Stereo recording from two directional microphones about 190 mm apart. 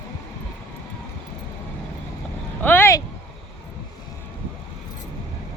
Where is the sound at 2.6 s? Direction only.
10° left (ahead or behind).